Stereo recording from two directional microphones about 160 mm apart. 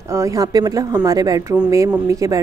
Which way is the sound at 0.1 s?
20° right (ahead or behind).